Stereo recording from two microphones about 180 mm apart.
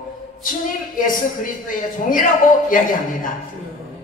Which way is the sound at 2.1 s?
50° left (ahead or behind).